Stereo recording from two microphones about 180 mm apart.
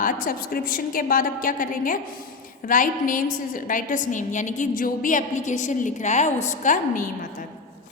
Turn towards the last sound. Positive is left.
turn(degrees=45)  # may be behind; listen again after turning